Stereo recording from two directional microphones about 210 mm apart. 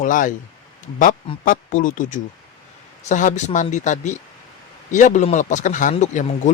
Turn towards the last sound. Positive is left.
turn(degrees=35)  # may be behind; listen again after turning